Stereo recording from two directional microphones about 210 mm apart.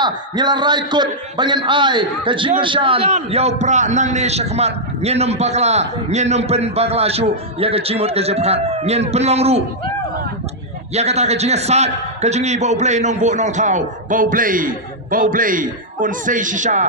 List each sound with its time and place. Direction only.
0.0 s a man's voice: 20° right (ahead or behind)
10.9 s a man's voice: 30° right (ahead or behind)